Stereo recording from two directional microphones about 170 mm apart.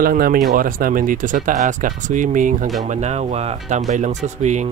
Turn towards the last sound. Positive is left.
turn(degrees=-40)  # may be behind; listen again after turning